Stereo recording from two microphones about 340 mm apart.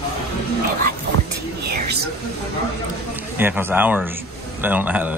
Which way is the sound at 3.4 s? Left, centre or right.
Centre.